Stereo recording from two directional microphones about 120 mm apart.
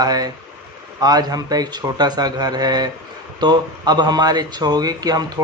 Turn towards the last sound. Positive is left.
turn(degrees=-30)  # may be behind; listen again after turning